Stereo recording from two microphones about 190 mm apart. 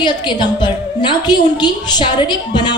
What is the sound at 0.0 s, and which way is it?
A woman's voice, 25° left (ahead or behind).